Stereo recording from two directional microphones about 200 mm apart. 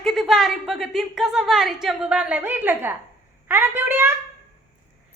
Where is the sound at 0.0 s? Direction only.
Centre (ahead or behind).